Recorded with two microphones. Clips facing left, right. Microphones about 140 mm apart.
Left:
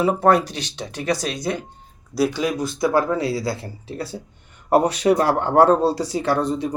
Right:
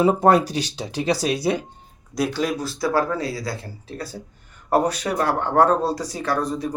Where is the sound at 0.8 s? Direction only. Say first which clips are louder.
Even; 35° right (ahead or behind).